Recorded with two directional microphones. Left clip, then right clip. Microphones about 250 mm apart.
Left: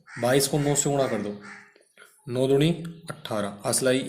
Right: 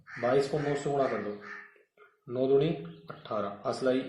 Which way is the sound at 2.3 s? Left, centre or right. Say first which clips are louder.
Left 4 dB; left.